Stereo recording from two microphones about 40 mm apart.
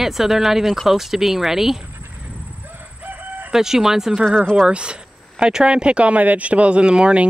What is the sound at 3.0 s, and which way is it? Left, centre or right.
Crowing, right.